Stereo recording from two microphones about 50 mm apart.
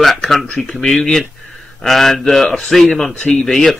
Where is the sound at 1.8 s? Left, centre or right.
Centre.